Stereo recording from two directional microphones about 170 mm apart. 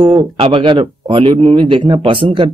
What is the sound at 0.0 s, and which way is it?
A man's voice, 30° right (ahead or behind).